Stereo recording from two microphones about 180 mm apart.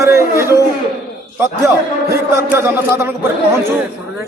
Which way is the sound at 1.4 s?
15° right (ahead or behind).